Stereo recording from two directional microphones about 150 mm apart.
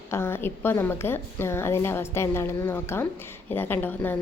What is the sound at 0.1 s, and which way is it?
Speech, 15° left (ahead or behind).